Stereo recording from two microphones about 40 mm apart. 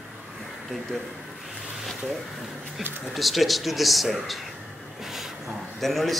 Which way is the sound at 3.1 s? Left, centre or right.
Centre.